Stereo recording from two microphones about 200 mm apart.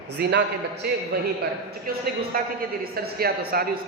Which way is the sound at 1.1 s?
50° right (ahead or behind).